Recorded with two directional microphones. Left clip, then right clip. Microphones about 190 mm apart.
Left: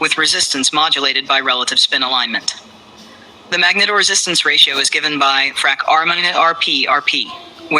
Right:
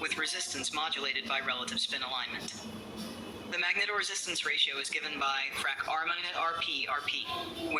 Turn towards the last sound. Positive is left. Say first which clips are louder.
# left 16 dB
turn(degrees=45)  # may be behind; listen again after turning